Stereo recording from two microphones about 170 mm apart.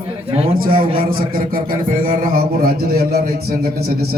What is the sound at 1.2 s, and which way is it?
A man's voice, 60° right (ahead or behind).